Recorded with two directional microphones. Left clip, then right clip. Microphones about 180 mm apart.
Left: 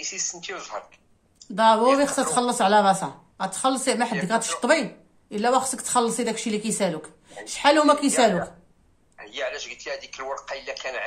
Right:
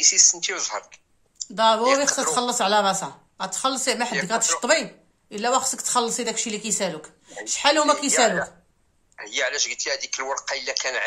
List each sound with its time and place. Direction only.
0.0 s speech: 45° right (ahead or behind)
1.5 s speech: 15° right (ahead or behind)
9.1 s speech: 45° right (ahead or behind)